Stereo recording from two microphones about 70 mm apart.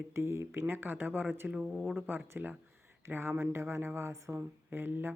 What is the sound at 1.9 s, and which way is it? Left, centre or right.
Speech, right.